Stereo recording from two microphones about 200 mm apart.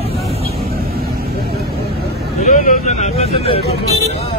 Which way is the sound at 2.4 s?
40° left (ahead or behind).